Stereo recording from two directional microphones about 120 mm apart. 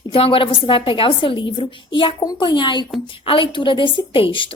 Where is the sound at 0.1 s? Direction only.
45° left (ahead or behind).